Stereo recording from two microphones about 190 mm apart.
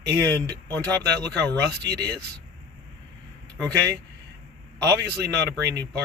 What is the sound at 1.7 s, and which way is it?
Speech, 60° right (ahead or behind).